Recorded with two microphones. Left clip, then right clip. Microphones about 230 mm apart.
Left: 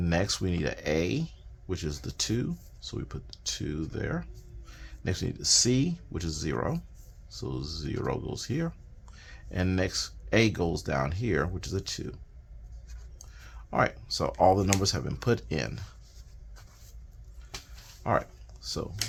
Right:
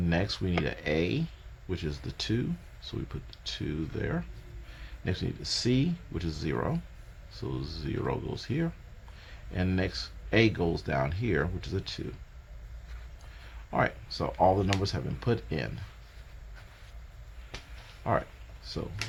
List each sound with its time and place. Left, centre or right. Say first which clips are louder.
0.0 s speech: left 2 dB; left
13.7 s speech: left 2 dB; left
18.0 s speech: left 2 dB; left